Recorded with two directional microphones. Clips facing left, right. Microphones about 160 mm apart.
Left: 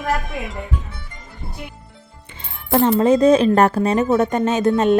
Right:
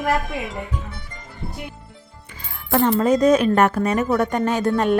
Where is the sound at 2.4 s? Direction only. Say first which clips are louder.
Left 2 dB; 25° left (ahead or behind).